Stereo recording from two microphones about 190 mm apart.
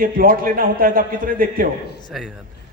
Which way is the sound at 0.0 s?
50° right (ahead or behind).